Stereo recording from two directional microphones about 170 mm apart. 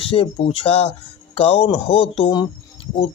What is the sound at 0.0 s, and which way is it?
Speech, 35° left (ahead or behind).